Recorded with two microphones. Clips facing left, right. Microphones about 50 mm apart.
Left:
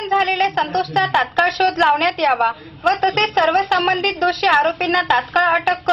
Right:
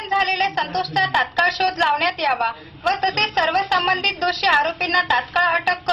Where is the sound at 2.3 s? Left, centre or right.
Centre.